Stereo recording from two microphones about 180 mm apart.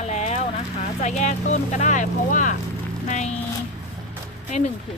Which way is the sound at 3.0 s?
40° left (ahead or behind).